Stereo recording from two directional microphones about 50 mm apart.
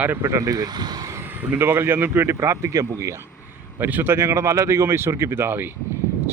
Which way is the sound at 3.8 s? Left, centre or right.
Right.